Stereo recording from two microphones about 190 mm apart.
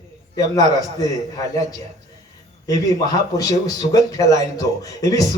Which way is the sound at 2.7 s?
20° left (ahead or behind).